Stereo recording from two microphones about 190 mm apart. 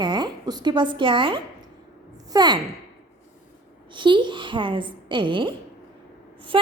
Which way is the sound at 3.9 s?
25° right (ahead or behind).